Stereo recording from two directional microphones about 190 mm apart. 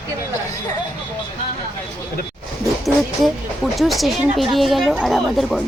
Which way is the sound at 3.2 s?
Centre (ahead or behind).